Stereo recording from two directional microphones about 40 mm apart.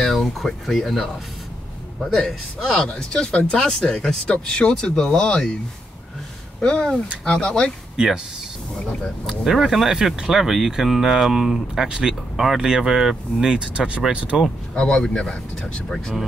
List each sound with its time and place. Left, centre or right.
0.0 s a man's voice: centre
2.6 s speech: centre
6.6 s speech: centre
7.9 s speech: centre
9.2 s speech: centre
11.9 s speech: centre
14.8 s speech: left